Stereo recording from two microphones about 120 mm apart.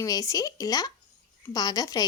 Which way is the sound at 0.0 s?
30° left (ahead or behind).